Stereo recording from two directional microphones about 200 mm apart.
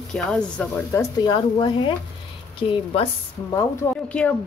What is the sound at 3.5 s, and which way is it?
Speech, 10° left (ahead or behind).